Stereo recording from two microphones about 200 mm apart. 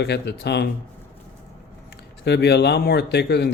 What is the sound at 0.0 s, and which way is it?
Speech, 55° left (ahead or behind).